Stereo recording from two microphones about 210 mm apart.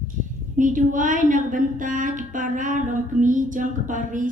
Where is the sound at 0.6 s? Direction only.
40° right (ahead or behind).